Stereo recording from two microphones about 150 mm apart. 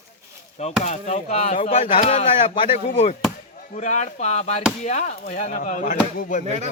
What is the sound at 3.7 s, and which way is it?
Speech, 55° left (ahead or behind).